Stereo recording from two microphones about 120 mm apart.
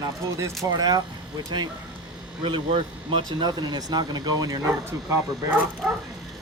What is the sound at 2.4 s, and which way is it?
Speech, 45° right (ahead or behind).